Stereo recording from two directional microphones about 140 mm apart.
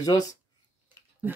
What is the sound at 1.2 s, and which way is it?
Speech, 15° right (ahead or behind).